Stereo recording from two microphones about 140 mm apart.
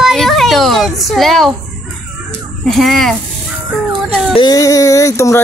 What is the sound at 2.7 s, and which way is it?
Speech, centre (ahead or behind).